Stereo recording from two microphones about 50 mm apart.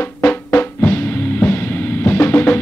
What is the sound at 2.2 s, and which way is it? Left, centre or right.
Music, left.